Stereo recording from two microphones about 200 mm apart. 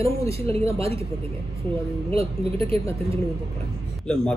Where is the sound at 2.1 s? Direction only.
30° right (ahead or behind).